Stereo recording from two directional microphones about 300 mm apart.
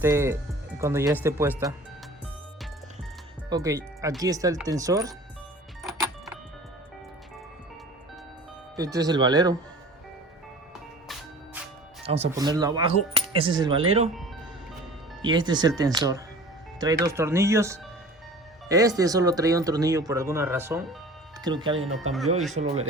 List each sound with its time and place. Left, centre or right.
0.0 s speech: centre
3.5 s speech: centre
5.8 s music: centre
8.7 s speech: centre
12.0 s speech: centre
15.2 s speech: centre